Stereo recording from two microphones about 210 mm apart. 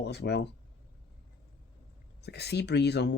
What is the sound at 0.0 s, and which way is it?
Speech, 50° left (ahead or behind).